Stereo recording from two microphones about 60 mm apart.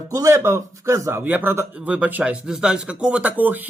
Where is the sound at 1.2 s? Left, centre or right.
Right.